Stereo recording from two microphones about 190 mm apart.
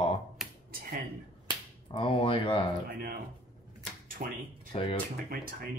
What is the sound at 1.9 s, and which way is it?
Speech, 30° left (ahead or behind).